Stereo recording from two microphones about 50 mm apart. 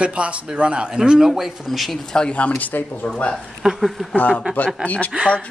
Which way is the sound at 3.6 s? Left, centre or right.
Centre.